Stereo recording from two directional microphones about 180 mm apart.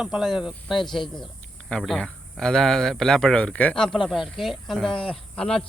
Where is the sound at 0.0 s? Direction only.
Centre (ahead or behind).